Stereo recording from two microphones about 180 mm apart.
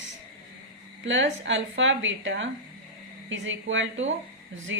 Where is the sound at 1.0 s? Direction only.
90° right.